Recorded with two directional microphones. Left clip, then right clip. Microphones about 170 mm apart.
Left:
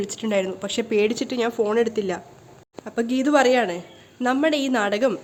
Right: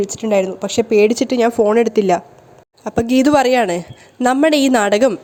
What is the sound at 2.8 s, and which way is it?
A woman's voice, 45° right (ahead or behind).